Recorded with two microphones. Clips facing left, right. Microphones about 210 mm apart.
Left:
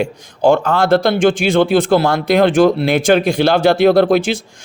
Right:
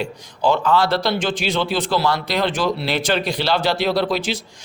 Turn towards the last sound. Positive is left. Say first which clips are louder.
# left 9 dB
turn(degrees=50)  # may be behind; listen again after turning